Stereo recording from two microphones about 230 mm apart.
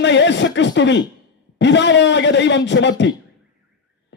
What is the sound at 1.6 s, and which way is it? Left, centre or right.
Speech, left.